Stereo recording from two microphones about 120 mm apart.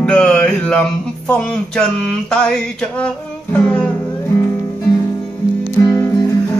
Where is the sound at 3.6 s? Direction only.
10° left (ahead or behind).